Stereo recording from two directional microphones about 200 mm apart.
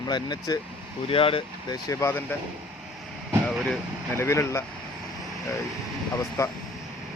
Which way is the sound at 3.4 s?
5° left (ahead or behind).